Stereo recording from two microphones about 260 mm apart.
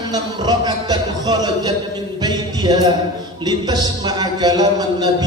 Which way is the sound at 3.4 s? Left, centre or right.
Centre.